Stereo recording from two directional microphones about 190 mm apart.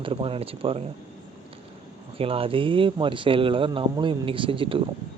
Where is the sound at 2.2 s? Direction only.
30° right (ahead or behind).